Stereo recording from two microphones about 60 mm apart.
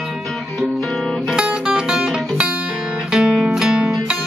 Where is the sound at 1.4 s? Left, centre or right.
Centre.